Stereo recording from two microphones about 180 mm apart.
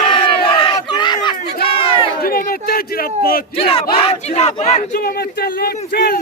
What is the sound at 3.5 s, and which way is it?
Speech, 30° left (ahead or behind).